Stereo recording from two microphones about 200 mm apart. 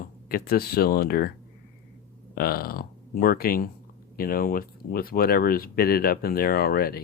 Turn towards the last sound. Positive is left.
turn(degrees=50)  # may be behind; listen again after turning